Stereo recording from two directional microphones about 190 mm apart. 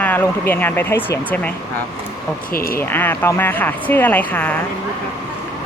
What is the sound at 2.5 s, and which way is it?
Speech, 50° left (ahead or behind).